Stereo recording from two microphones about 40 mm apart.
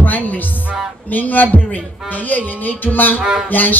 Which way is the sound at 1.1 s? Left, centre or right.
Left.